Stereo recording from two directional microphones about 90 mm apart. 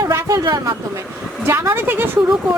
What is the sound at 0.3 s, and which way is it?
Speech, 50° right (ahead or behind).